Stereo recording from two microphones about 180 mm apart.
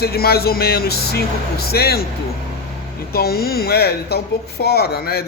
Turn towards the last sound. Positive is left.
turn(degrees=60)  # may be behind; listen again after turning